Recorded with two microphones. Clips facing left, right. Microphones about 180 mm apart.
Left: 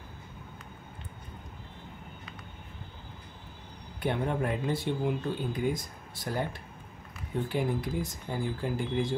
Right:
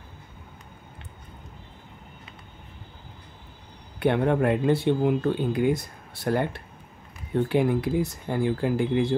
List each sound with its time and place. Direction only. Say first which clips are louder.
4.0 s speech: right 8 dB; 70° right (ahead or behind)